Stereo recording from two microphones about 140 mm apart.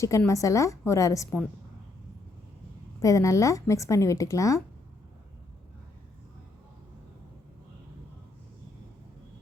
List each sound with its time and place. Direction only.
0.3 s speech: 25° left (ahead or behind)
3.0 s speech: 25° left (ahead or behind)